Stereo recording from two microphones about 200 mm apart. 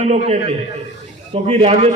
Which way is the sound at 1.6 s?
30° right (ahead or behind).